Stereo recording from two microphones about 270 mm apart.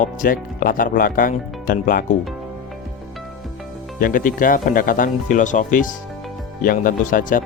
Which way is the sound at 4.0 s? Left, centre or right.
Left.